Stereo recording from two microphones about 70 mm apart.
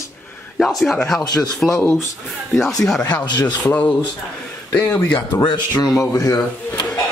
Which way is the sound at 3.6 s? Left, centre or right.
Left.